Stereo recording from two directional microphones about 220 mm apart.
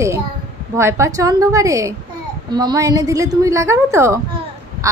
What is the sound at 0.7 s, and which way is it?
A woman's voice, 15° right (ahead or behind).